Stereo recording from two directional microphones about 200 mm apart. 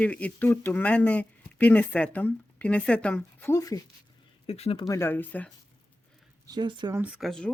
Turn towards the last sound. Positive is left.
turn(degrees=0)  # may be behind; listen again after turning